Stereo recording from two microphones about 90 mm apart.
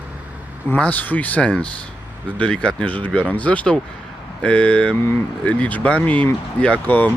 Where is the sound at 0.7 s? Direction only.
20° left (ahead or behind).